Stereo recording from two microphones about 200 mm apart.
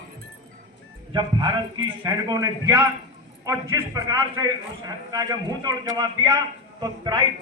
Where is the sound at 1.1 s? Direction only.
25° right (ahead or behind).